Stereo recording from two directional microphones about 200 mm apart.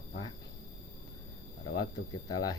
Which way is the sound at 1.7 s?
20° left (ahead or behind).